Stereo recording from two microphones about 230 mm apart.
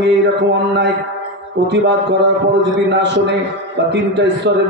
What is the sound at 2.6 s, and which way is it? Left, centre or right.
A man's voice, right.